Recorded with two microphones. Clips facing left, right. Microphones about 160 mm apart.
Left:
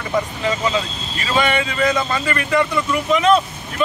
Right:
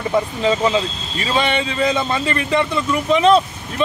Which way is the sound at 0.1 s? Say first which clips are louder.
Right 2 dB; 25° right (ahead or behind).